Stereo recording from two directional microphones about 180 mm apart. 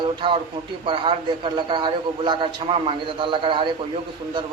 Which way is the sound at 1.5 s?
25° right (ahead or behind).